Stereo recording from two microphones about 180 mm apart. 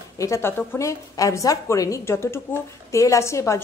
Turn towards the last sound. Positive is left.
turn(degrees=15)  # may be behind; listen again after turning